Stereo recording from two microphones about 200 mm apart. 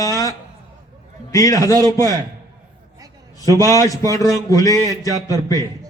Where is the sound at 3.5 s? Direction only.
15° left (ahead or behind).